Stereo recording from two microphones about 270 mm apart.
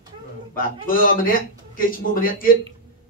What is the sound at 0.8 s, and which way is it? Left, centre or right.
A man's voice, left.